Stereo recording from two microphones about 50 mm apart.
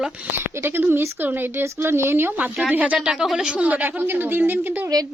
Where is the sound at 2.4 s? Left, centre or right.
Right.